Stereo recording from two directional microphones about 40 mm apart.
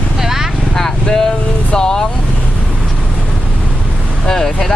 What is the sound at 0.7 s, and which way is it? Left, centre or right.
Speech, centre.